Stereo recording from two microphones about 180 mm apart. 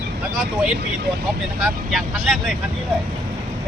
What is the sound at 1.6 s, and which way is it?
Speech, centre (ahead or behind).